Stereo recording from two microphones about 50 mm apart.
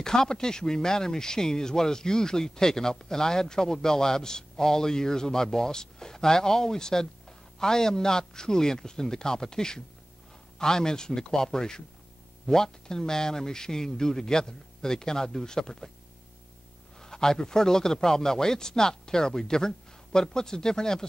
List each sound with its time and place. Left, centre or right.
0.0 s speech: centre
17.0 s speech: centre